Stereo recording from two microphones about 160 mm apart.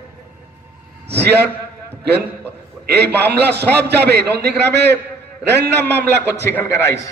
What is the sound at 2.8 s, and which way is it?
A man's voice, 90° right.